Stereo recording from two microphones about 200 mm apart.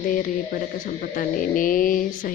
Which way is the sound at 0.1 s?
45° left (ahead or behind).